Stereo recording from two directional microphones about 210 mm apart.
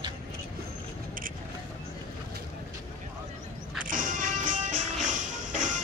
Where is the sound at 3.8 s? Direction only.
40° right (ahead or behind).